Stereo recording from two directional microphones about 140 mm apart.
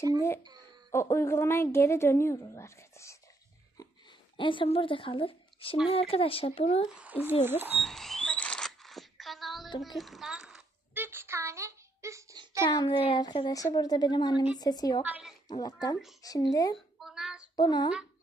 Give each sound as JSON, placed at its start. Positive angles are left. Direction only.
{"t": 0.9, "sound": "a woman's voice", "side_deg": 20}
{"t": 4.4, "sound": "a woman's voice", "side_deg": 35}
{"t": 6.9, "sound": "speech", "side_deg": -10}
{"t": 7.8, "sound": "a sound", "side_deg": 0}
{"t": 11.1, "sound": "child singing", "side_deg": -15}
{"t": 12.6, "sound": "a woman's voice", "side_deg": 35}
{"t": 15.0, "sound": "a woman's voice", "side_deg": -10}
{"t": 15.6, "sound": "a woman's voice", "side_deg": 30}
{"t": 16.7, "sound": "a sound", "side_deg": -5}
{"t": 17.6, "sound": "a woman's voice", "side_deg": 30}